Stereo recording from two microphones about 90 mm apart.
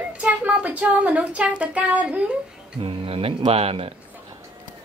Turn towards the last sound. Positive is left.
turn(degrees=-90)